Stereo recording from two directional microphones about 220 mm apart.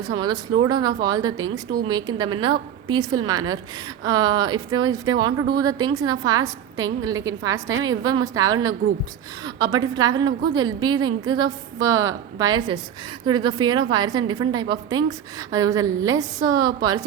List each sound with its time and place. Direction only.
0.0 s a woman's voice: 20° right (ahead or behind)